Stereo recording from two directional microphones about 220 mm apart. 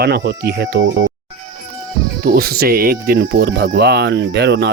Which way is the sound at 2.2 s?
45° right (ahead or behind).